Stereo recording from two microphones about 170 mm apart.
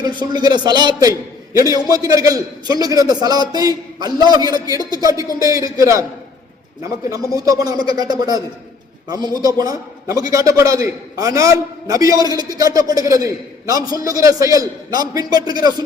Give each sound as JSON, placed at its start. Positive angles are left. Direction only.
{"t": 0.0, "sound": "a man's voice", "side_deg": -25}
{"t": 7.3, "sound": "a man's voice", "side_deg": -20}